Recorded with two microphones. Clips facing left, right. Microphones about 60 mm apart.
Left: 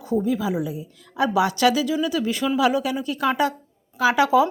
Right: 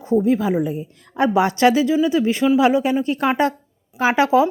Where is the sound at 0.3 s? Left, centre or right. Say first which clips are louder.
Right 5 dB; right.